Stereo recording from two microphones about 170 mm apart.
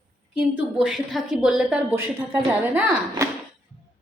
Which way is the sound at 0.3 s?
5° right (ahead or behind).